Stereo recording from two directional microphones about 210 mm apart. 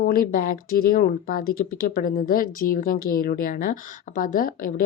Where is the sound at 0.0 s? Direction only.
40° left (ahead or behind).